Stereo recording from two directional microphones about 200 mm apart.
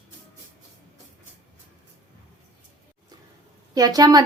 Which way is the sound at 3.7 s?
20° right (ahead or behind).